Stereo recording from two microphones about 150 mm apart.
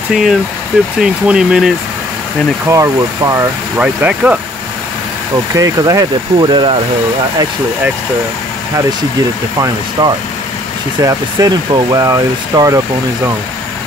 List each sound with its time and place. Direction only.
0.1 s speech: centre (ahead or behind)
2.7 s speech: 20° right (ahead or behind)
5.6 s speech: 25° right (ahead or behind)
9.6 s speech: 25° right (ahead or behind)